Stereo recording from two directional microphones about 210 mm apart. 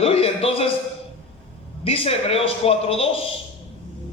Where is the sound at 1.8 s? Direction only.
25° left (ahead or behind).